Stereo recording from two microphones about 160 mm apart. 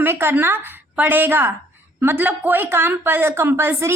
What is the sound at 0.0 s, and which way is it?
Speech, 15° right (ahead or behind).